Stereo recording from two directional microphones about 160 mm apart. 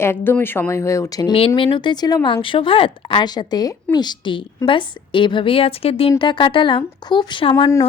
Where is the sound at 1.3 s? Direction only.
35° left (ahead or behind).